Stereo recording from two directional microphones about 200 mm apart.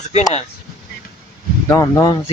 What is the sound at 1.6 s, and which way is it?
Speech, 15° left (ahead or behind).